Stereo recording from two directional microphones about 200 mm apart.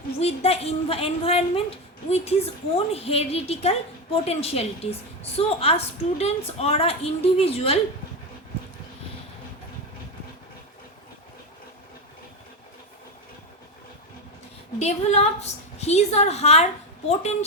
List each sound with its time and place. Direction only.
0.2 s a woman's voice: 30° left (ahead or behind)
14.8 s a woman's voice: 35° left (ahead or behind)